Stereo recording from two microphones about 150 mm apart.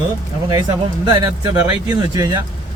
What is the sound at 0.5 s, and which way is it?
Speech, 30° right (ahead or behind).